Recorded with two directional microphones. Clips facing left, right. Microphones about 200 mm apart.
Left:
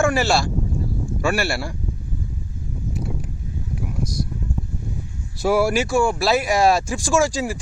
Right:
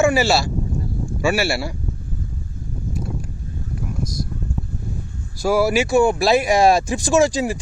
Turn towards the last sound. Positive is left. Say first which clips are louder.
# right 3 dB
turn(degrees=-20)  # may be behind; listen again after turning